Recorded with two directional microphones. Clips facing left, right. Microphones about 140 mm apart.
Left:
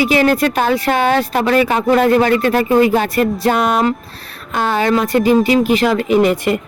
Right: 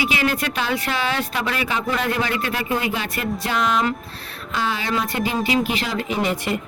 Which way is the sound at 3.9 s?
40° left (ahead or behind).